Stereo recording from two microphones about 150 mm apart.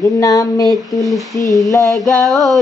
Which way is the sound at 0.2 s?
20° left (ahead or behind).